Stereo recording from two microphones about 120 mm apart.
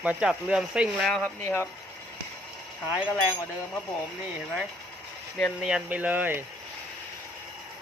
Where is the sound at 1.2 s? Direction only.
20° left (ahead or behind).